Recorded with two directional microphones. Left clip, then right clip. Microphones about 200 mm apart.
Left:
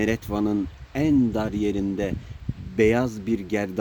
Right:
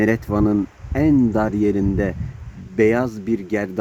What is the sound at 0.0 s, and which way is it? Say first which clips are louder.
Speech: right 6 dB; 35° right (ahead or behind).